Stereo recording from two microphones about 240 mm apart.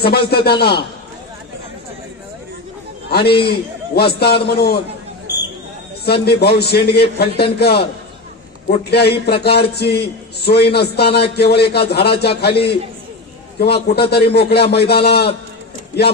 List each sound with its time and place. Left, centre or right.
0.0 s a man's voice: left
3.4 s a man's voice: left
6.2 s a man's voice: left